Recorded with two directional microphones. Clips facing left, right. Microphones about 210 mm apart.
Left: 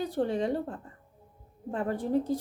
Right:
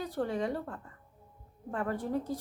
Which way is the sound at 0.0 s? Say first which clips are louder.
Left 4 dB; 25° left (ahead or behind).